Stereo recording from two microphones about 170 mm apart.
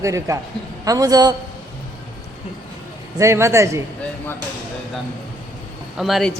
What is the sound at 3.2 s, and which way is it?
Speech, 15° right (ahead or behind).